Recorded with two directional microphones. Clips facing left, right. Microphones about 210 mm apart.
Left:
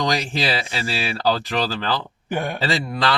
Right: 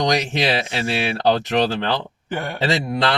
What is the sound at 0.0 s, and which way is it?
Speech, 20° right (ahead or behind).